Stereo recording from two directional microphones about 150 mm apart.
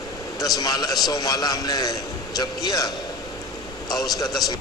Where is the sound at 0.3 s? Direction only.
25° left (ahead or behind).